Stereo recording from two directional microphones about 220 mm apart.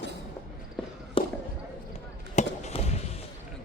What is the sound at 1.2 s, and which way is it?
Basketball bounce, 25° left (ahead or behind).